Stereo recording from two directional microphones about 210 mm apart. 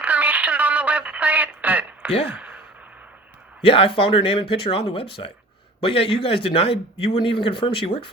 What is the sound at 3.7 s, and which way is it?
Speech, 25° left (ahead or behind).